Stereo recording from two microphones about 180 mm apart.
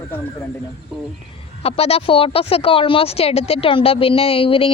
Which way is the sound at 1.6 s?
35° left (ahead or behind).